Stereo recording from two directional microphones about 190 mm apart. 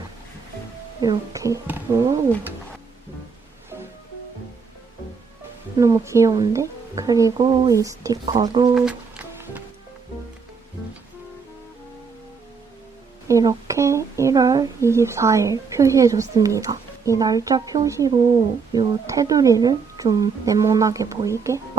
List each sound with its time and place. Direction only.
1.0 s speech: 15° right (ahead or behind)
5.7 s speech: 15° right (ahead or behind)
8.7 s music: 5° right (ahead or behind)
13.2 s speech: 20° right (ahead or behind)